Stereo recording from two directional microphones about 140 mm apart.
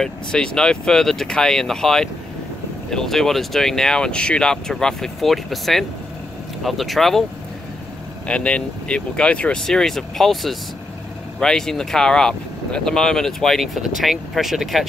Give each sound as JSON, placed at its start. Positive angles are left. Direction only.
{"t": 0.0, "sound": "speech", "side_deg": 5}
{"t": 8.3, "sound": "speech", "side_deg": 5}